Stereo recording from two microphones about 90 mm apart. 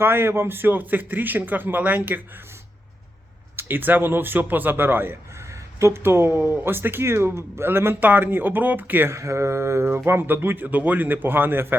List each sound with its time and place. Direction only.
0.0 s speech: 25° right (ahead or behind)
3.5 s a man's voice: 25° right (ahead or behind)
9.1 s speech: 35° right (ahead or behind)